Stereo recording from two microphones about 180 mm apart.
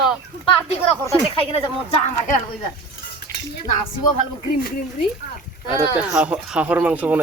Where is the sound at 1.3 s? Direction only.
30° left (ahead or behind).